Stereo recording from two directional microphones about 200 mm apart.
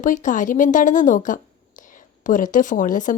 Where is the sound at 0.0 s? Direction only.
40° left (ahead or behind).